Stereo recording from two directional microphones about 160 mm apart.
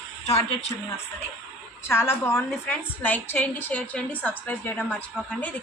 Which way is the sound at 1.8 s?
15° left (ahead or behind).